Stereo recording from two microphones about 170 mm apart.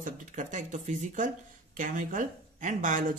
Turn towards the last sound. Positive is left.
turn(degrees=-50)  # may be behind; listen again after turning